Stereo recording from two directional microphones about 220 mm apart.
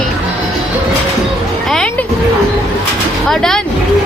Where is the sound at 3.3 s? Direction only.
Centre (ahead or behind).